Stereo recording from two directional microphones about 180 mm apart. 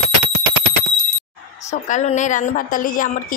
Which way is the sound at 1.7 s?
40° left (ahead or behind).